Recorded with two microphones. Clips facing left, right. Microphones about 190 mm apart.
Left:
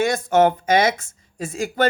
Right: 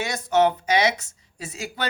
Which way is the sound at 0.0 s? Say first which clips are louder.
Left 4 dB; 50° left (ahead or behind).